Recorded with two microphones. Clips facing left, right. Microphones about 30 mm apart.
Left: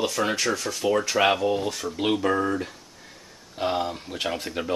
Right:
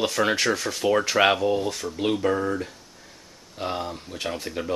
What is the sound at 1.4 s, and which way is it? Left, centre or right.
Speech, centre.